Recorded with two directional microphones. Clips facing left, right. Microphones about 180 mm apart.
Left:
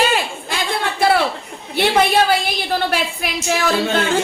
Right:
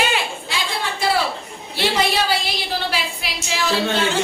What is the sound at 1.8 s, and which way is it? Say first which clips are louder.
A woman's voice: left 5 dB; 55° left (ahead or behind).